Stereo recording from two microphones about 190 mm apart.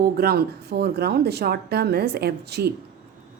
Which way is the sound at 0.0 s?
55° right (ahead or behind).